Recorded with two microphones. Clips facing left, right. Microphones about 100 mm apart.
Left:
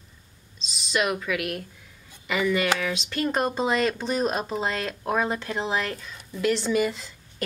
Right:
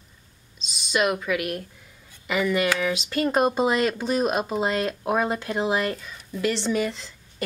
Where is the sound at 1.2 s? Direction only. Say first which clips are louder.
Right 2 dB; centre (ahead or behind).